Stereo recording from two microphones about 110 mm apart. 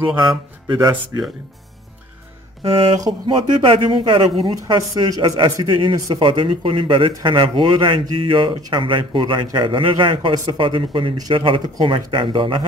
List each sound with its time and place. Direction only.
0.0 s a man's voice: 45° right (ahead or behind)
2.6 s a man's voice: 55° right (ahead or behind)
4.6 s speech: 40° right (ahead or behind)
5.7 s a man's voice: 45° right (ahead or behind)